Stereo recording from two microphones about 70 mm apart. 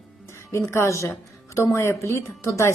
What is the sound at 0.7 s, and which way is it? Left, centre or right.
A woman's voice, left.